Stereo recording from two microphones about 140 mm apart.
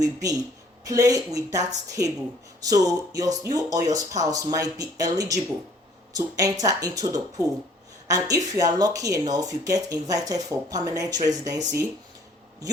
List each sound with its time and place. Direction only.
0.0 s speech: 25° right (ahead or behind)